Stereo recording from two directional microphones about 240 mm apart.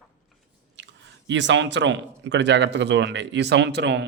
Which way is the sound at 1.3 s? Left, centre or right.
Right.